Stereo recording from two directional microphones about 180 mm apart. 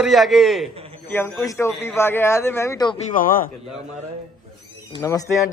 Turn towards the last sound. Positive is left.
turn(degrees=20)  # may be behind; listen again after turning